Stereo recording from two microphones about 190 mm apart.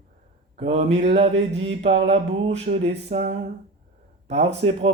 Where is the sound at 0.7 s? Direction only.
35° right (ahead or behind).